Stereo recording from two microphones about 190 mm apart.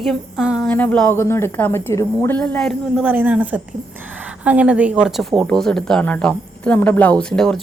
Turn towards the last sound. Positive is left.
turn(degrees=5)  # may be behind; listen again after turning